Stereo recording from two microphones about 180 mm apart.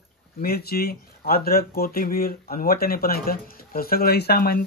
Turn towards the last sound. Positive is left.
turn(degrees=60)  # may be behind; listen again after turning